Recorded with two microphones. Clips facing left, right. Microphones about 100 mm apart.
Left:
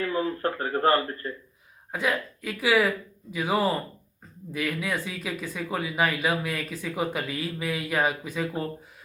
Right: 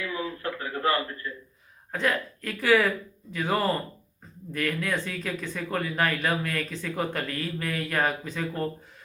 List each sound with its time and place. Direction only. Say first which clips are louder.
0.0 s speech: left 5 dB; 40° left (ahead or behind)
1.9 s speech: even; 5° left (ahead or behind)